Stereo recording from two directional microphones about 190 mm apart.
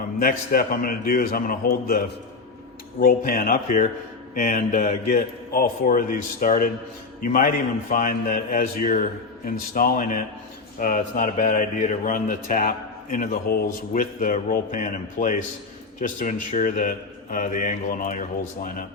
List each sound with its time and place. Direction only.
0.2 s speech: 50° left (ahead or behind)
4.4 s mantra: 35° left (ahead or behind)
5.5 s speech: 50° left (ahead or behind)